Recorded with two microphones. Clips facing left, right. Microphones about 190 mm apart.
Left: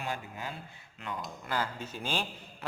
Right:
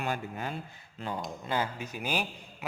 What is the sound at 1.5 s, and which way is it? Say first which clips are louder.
A man's voice: right 2 dB; 15° right (ahead or behind).